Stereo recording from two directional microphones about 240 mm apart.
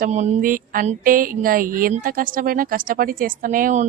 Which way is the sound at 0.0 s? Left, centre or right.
Right.